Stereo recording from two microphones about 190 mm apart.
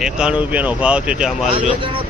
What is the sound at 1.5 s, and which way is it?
Speech, 30° right (ahead or behind).